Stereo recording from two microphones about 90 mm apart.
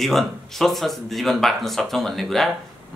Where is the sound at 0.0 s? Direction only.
Centre (ahead or behind).